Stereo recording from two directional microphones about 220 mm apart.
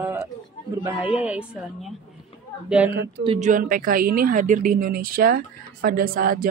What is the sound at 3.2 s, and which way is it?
Speech, 25° right (ahead or behind).